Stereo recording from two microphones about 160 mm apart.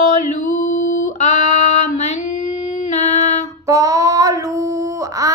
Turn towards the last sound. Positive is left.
turn(degrees=-20)  # may be behind; listen again after turning